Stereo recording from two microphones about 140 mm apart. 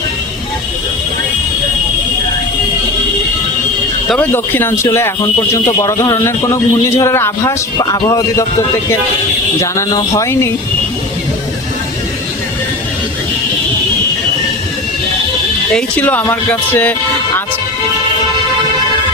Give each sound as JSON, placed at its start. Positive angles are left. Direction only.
{"t": 4.2, "sound": "speech", "side_deg": 15}
{"t": 9.6, "sound": "speech", "side_deg": 25}
{"t": 15.7, "sound": "speech", "side_deg": 10}